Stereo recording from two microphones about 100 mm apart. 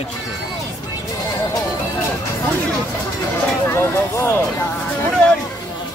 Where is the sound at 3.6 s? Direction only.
25° left (ahead or behind).